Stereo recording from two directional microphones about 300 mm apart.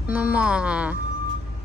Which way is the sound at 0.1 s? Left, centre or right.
Centre.